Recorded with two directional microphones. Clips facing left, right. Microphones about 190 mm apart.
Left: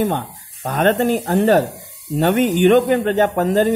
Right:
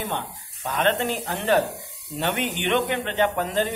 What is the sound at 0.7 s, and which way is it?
A man's voice, 45° left (ahead or behind).